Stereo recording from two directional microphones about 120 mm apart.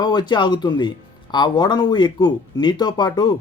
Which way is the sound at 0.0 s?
35° left (ahead or behind).